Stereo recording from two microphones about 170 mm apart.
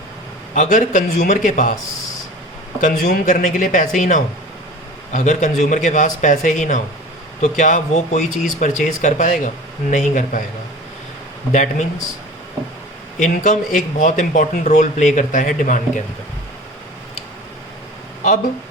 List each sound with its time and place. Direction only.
0.5 s speech: 45° left (ahead or behind)
2.8 s speech: 55° left (ahead or behind)
11.5 s speech: 50° left (ahead or behind)
13.1 s speech: 50° left (ahead or behind)